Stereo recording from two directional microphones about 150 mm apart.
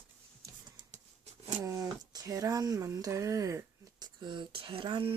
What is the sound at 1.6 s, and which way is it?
Speech, 20° right (ahead or behind).